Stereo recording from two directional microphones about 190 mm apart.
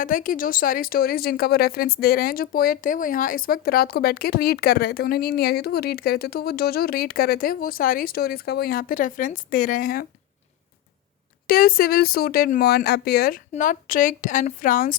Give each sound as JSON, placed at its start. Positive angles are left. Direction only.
{"t": 0.0, "sound": "speech", "side_deg": 45}
{"t": 11.4, "sound": "speech", "side_deg": 50}